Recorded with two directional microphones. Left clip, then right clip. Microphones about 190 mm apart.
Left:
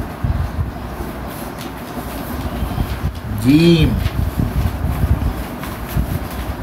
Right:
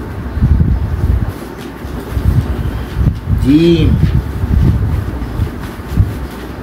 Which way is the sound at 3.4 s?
55° left (ahead or behind).